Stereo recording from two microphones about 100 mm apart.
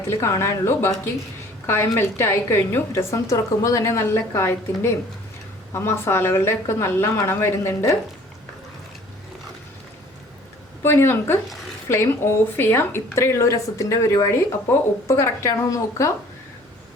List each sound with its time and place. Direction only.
0.1 s a woman's voice: 25° left (ahead or behind)
10.8 s a woman's voice: 20° left (ahead or behind)